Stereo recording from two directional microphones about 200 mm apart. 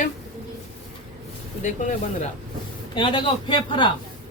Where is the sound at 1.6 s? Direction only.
40° left (ahead or behind).